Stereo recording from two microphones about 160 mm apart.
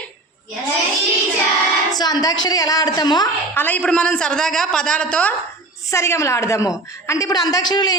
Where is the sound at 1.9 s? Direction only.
25° left (ahead or behind).